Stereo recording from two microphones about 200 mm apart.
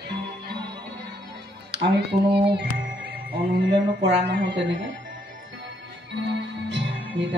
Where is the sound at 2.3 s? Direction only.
55° right (ahead or behind).